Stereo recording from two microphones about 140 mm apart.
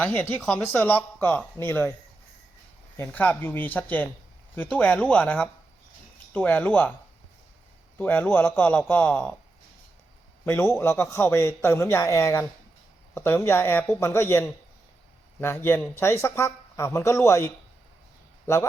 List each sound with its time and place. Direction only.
0.0 s a man's voice: 10° left (ahead or behind)
3.0 s a man's voice: 10° left (ahead or behind)
7.9 s a man's voice: 10° left (ahead or behind)
10.4 s a man's voice: 15° left (ahead or behind)